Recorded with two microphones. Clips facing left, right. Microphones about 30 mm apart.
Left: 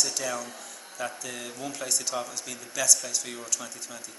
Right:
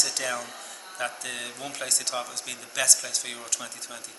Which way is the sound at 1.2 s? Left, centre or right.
Right.